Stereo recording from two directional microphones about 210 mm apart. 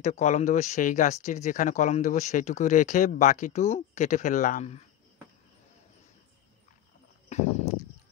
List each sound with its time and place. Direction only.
0.0 s speech: 35° left (ahead or behind)